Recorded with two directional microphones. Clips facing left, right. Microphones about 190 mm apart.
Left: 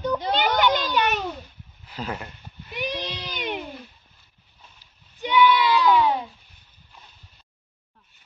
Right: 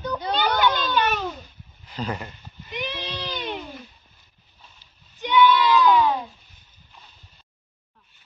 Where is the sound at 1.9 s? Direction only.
5° left (ahead or behind).